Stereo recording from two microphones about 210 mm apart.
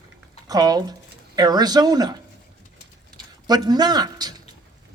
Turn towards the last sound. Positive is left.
turn(degrees=-20)  # may be behind; listen again after turning